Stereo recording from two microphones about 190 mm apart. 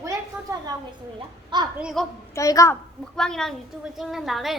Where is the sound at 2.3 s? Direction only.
15° left (ahead or behind).